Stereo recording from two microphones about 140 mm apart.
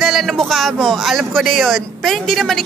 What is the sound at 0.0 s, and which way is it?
Speech, centre (ahead or behind).